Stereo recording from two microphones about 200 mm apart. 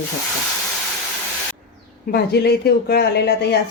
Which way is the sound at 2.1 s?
55° left (ahead or behind).